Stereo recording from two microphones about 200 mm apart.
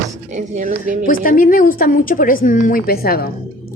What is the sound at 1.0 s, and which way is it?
Speech, 45° left (ahead or behind).